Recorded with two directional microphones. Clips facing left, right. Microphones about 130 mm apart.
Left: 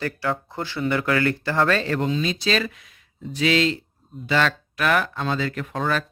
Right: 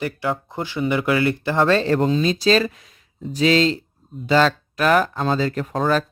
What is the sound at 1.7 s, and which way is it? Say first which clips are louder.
Speech: right 5 dB; 35° right (ahead or behind).